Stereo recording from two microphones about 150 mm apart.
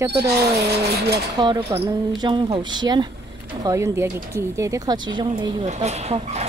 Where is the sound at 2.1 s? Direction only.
30° right (ahead or behind).